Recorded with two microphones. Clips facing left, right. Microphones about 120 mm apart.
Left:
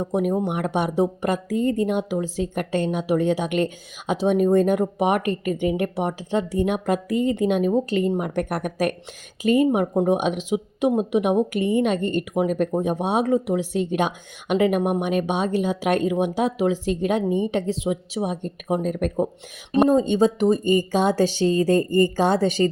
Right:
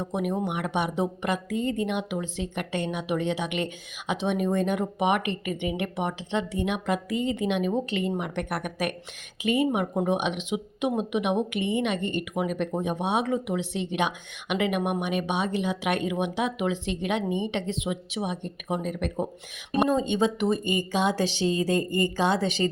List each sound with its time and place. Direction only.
0.1 s speech: 35° left (ahead or behind)